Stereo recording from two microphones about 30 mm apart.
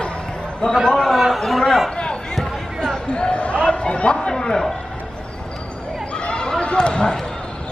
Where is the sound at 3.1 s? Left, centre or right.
Left.